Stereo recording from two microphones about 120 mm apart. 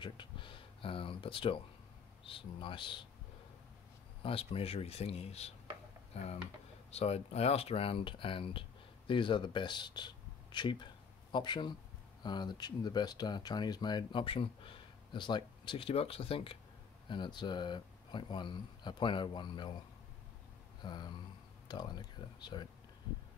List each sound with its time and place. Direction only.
0.0 s speech: 40° left (ahead or behind)
4.2 s speech: 50° left (ahead or behind)
6.9 s speech: 60° left (ahead or behind); by 19.7 s 40° left (ahead or behind)
20.8 s speech: 35° left (ahead or behind)